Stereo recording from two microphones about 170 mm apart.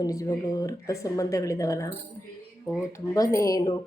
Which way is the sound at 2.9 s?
20° left (ahead or behind).